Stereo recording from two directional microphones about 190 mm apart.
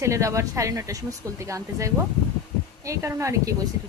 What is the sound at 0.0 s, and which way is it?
Speech, 15° right (ahead or behind).